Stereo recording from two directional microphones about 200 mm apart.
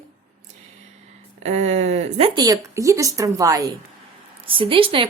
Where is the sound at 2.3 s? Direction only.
15° right (ahead or behind).